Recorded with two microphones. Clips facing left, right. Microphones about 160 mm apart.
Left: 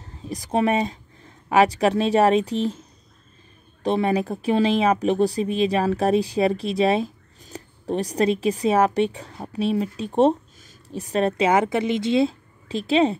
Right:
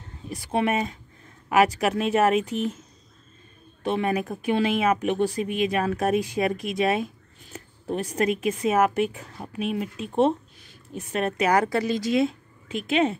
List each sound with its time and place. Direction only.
0.3 s speech: 35° left (ahead or behind)
3.8 s speech: 35° left (ahead or behind)